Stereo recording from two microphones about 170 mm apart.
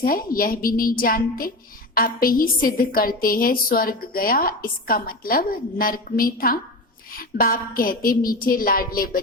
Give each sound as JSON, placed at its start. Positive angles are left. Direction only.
{"t": 0.0, "sound": "a woman's voice", "side_deg": 60}